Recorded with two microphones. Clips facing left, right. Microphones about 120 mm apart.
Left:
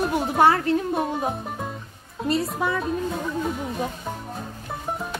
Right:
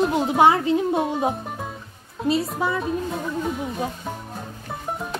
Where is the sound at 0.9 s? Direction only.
Centre (ahead or behind).